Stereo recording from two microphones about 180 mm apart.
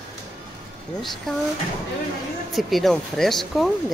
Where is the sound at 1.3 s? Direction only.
5° left (ahead or behind).